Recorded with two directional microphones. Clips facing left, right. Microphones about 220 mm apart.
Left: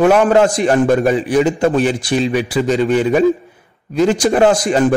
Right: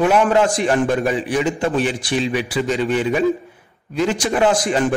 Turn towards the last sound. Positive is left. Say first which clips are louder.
# left 4 dB
turn(degrees=40)  # may be behind; listen again after turning